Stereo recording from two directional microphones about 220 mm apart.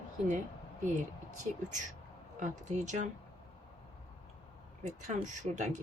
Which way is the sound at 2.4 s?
35° right (ahead or behind).